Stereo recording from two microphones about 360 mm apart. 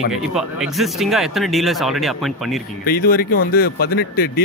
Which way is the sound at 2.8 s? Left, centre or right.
Left.